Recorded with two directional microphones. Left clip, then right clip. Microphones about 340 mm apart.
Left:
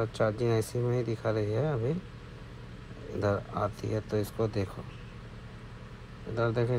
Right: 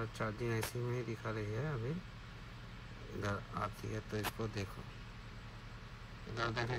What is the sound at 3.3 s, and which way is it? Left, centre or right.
Speech, left.